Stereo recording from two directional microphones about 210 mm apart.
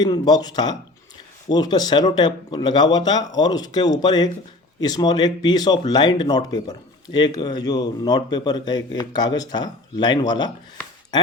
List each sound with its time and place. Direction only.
0.0 s speech: 20° left (ahead or behind)